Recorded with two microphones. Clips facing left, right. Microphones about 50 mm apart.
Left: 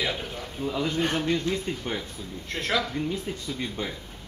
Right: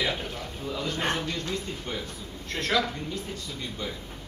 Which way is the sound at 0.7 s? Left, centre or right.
Centre.